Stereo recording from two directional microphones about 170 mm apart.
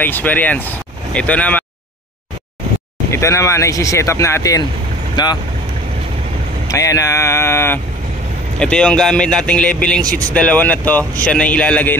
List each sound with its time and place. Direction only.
0.0 s speech: 10° left (ahead or behind)
3.1 s speech: 15° left (ahead or behind)
6.7 s a man's voice: 20° left (ahead or behind)